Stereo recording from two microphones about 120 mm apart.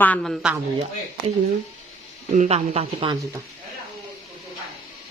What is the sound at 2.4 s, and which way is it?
Speech, 60° right (ahead or behind).